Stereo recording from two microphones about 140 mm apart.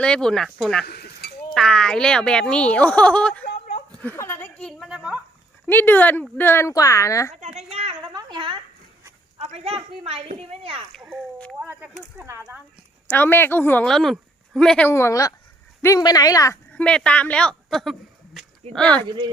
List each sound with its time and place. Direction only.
0.0 s speech: 5° left (ahead or behind)
3.9 s a sound: 15° left (ahead or behind)
4.8 s a sound: 5° right (ahead or behind)
5.6 s speech: 15° left (ahead or behind)
7.7 s a sound: 45° right (ahead or behind)
9.4 s speech: 45° right (ahead or behind)
11.6 s speech: 15° right (ahead or behind)
13.1 s speech: 15° left (ahead or behind)
13.9 s speech: centre (ahead or behind)
14.8 s speech: 20° left (ahead or behind)
16.7 s speech: 5° left (ahead or behind)